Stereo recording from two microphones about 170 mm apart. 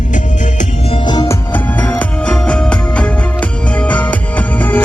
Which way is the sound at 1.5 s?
10° left (ahead or behind).